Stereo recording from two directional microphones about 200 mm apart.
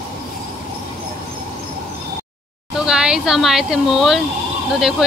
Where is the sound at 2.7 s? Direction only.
5° right (ahead or behind).